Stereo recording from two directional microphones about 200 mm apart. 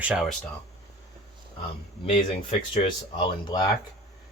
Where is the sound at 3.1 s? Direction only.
25° left (ahead or behind).